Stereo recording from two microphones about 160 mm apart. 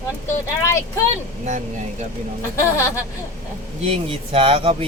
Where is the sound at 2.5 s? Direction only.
15° left (ahead or behind).